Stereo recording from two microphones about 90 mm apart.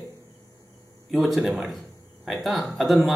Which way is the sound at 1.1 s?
5° right (ahead or behind).